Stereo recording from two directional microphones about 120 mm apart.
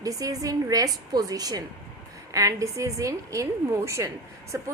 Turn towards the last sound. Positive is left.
turn(degrees=-25)  # may be behind; listen again after turning